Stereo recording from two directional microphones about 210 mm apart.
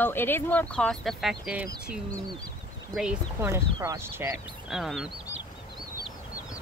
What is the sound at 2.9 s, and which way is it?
Speech, 5° right (ahead or behind).